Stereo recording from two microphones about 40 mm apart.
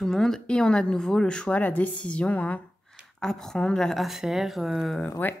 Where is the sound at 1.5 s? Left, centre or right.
Left.